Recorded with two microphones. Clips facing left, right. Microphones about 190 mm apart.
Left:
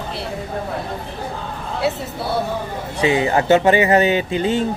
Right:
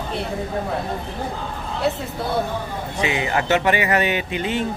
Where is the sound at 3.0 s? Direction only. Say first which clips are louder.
Left 6 dB; 30° left (ahead or behind).